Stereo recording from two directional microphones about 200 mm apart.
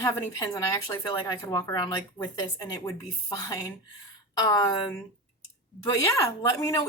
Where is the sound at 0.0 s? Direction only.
15° left (ahead or behind).